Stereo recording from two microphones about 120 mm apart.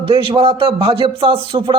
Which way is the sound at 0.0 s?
50° right (ahead or behind).